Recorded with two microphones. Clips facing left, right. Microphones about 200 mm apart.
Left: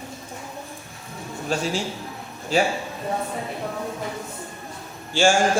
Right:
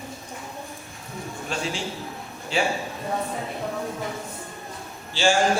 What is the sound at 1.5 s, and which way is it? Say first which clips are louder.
A man's voice: left 5 dB; 40° left (ahead or behind).